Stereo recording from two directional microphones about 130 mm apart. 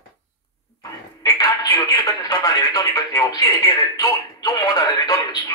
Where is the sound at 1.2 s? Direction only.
30° left (ahead or behind).